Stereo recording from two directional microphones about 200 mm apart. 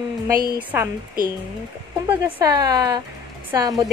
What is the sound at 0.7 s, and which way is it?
Speech, 10° right (ahead or behind).